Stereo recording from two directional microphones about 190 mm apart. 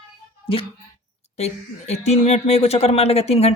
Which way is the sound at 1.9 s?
35° left (ahead or behind).